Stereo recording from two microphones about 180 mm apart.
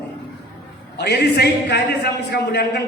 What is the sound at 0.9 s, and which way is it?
A man's voice, 65° left (ahead or behind).